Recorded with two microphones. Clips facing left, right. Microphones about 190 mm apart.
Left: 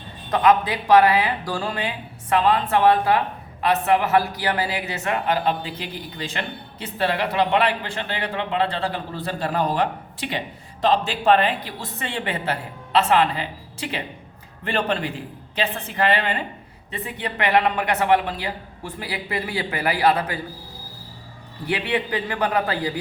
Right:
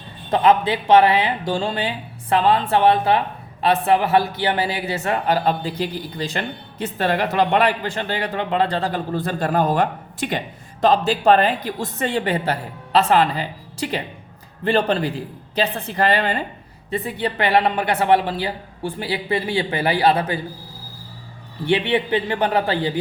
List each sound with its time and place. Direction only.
0.3 s a man's voice: 30° right (ahead or behind)
21.7 s speech: 25° right (ahead or behind)